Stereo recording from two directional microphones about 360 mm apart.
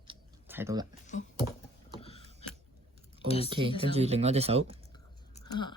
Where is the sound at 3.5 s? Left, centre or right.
Centre.